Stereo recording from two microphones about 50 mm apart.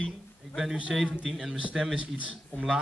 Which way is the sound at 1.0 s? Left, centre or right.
Centre.